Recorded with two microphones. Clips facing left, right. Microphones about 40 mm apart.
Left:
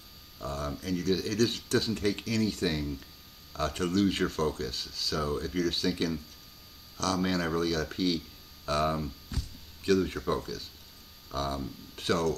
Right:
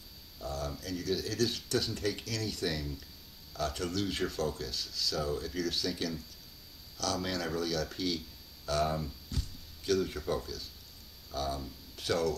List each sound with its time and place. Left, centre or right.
0.4 s speech: left
7.2 s speech: left
8.8 s speech: centre
9.8 s speech: left